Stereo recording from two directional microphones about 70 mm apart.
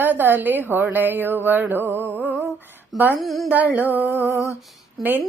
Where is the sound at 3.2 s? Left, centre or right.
Centre.